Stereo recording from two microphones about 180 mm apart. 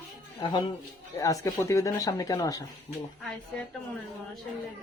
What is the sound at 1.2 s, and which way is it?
Speech, 20° left (ahead or behind).